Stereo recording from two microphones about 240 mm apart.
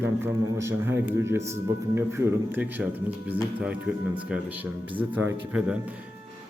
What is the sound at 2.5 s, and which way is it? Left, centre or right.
A man's voice, centre.